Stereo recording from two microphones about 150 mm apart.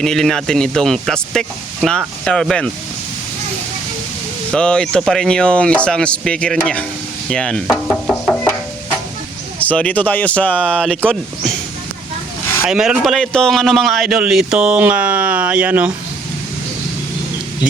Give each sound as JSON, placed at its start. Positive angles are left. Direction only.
{"t": 0.0, "sound": "a man's voice", "side_deg": 5}
{"t": 4.5, "sound": "a man's voice", "side_deg": 5}
{"t": 9.6, "sound": "speech", "side_deg": 10}
{"t": 12.6, "sound": "a man's voice", "side_deg": -5}